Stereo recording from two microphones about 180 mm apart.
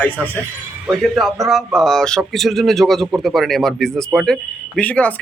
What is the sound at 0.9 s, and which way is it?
Speech, centre (ahead or behind).